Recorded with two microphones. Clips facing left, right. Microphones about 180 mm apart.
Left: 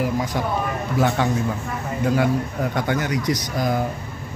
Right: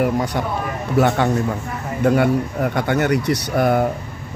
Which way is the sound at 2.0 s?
60° right (ahead or behind).